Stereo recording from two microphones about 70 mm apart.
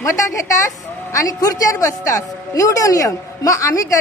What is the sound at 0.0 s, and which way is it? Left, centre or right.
A woman's voice, left.